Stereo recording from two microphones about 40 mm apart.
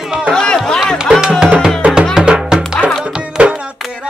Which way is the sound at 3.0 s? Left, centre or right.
Right.